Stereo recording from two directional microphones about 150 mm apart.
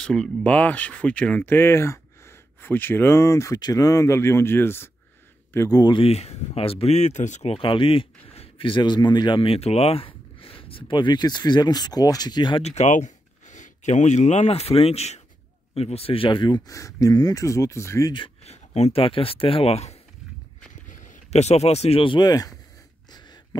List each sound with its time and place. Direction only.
0.0 s speech: 5° left (ahead or behind); by 7.5 s 50° left (ahead or behind)
7.5 s speech: 35° left (ahead or behind)
12.6 s speech: 50° left (ahead or behind); by 18.1 s 20° left (ahead or behind)
18.1 s speech: 40° left (ahead or behind)
20.9 s speech: 60° left (ahead or behind); by 22.5 s 25° left (ahead or behind)